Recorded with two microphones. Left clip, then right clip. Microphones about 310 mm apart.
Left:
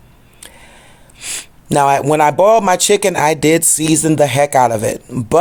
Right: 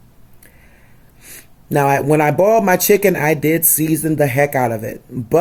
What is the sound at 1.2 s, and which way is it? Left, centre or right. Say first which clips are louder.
Speech: left 14 dB; centre.